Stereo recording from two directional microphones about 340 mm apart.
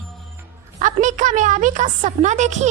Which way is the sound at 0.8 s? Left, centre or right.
Right.